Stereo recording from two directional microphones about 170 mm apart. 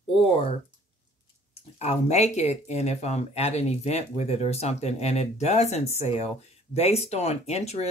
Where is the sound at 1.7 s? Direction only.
40° left (ahead or behind).